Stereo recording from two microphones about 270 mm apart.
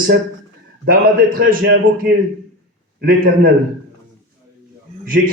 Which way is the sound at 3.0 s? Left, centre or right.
Right.